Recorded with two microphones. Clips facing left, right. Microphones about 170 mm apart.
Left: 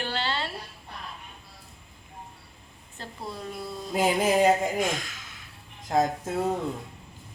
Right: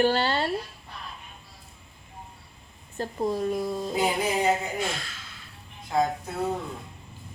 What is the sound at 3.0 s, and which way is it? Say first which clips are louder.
Speech: right 11 dB; 45° right (ahead or behind).